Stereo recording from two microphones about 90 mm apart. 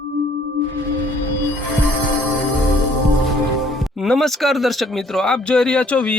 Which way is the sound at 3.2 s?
Centre (ahead or behind).